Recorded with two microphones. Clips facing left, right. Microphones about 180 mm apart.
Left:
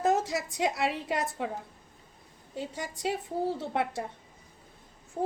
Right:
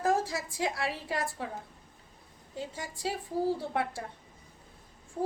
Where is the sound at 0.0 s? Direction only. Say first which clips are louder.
Left 2 dB; 20° left (ahead or behind).